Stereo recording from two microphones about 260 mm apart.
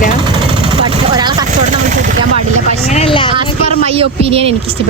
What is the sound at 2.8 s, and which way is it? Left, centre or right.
Speech, left.